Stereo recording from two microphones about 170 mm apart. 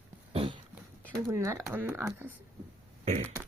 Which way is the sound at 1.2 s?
15° right (ahead or behind).